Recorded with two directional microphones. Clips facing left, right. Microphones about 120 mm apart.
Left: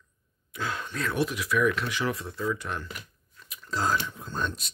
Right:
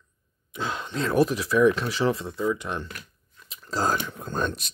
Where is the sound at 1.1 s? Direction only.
35° right (ahead or behind); by 2.9 s 20° right (ahead or behind).